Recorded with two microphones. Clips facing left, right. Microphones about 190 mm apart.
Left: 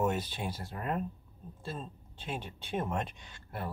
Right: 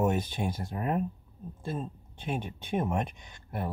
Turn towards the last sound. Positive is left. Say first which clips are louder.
# right 4 dB
turn(degrees=-15)  # may be behind; listen again after turning